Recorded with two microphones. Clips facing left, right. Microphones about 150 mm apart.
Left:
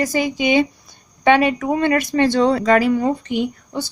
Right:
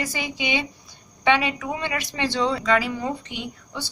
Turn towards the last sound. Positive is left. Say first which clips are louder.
# left 10 dB
turn(degrees=50)  # may be behind; listen again after turning